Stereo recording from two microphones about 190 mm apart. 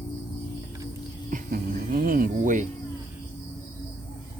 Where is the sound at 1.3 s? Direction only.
50° right (ahead or behind).